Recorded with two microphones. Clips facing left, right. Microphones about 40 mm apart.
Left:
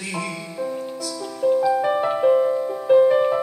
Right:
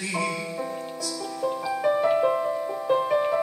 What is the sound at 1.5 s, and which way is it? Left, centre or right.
Music, centre.